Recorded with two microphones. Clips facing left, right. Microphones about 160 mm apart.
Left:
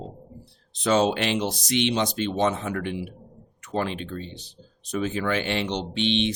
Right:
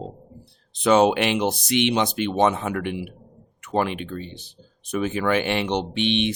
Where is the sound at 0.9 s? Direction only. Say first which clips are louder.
Right 4 dB; 65° right (ahead or behind).